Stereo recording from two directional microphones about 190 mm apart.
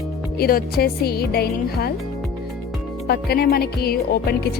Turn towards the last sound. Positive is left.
turn(degrees=55)  # may be behind; listen again after turning